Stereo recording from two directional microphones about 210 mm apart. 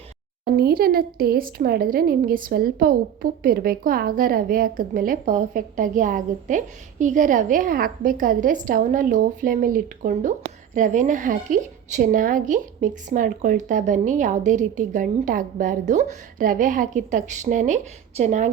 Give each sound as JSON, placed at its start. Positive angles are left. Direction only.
{"t": 0.5, "sound": "a woman's voice", "side_deg": -45}